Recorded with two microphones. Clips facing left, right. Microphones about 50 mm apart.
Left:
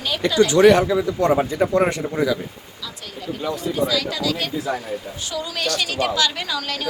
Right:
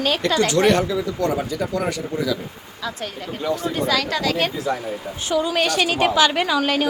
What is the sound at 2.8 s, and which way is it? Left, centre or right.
Speech, right.